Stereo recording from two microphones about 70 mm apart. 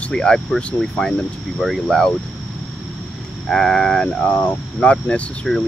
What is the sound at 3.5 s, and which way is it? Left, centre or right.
Speech, centre.